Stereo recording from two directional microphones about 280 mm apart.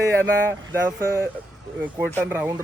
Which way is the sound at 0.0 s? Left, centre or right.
Centre.